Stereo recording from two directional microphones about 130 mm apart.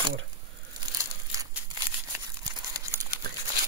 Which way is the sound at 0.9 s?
25° right (ahead or behind).